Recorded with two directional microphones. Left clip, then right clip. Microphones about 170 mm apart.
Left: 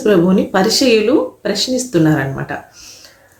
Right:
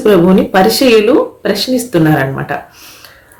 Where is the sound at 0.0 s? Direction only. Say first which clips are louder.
Right 4 dB; 15° right (ahead or behind).